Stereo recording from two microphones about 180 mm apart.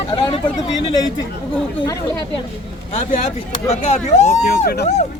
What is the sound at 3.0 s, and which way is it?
Speech, 45° left (ahead or behind).